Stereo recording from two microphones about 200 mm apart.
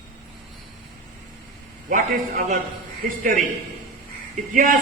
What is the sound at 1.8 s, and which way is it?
Speech, 45° right (ahead or behind).